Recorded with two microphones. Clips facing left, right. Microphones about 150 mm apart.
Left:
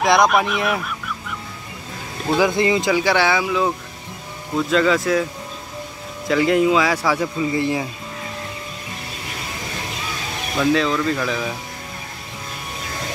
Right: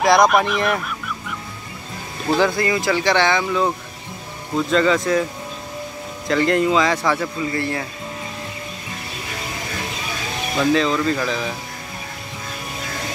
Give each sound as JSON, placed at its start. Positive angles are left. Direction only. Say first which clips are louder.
{"t": 0.0, "sound": "speech", "louder": "right 1 dB", "side_deg": 0}
{"t": 2.5, "sound": "speech", "louder": "left 3 dB", "side_deg": 20}
{"t": 2.9, "sound": "a man's voice", "louder": "even", "side_deg": 10}
{"t": 6.2, "sound": "a man's voice", "louder": "left 1 dB", "side_deg": 5}
{"t": 10.6, "sound": "speech", "louder": "even", "side_deg": 0}